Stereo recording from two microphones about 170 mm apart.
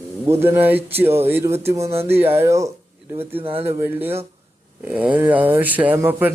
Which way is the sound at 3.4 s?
35° right (ahead or behind).